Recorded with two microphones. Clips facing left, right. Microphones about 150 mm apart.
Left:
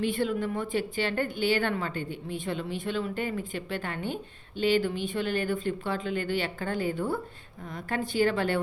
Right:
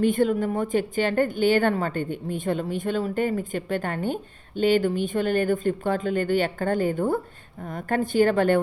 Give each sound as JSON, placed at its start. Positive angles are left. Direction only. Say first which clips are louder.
{"t": 0.0, "sound": "a woman's voice", "louder": "right 7 dB", "side_deg": -45}